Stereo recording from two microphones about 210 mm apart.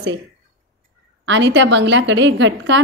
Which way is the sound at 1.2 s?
60° right (ahead or behind).